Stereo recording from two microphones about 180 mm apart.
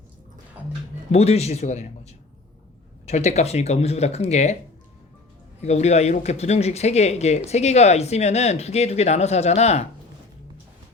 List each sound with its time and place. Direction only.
1.1 s speech: 35° left (ahead or behind)
5.6 s speech: 40° left (ahead or behind)